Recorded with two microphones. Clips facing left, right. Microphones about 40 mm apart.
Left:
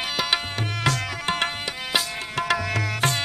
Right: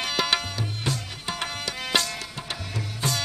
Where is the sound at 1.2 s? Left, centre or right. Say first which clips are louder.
Left 7 dB; left.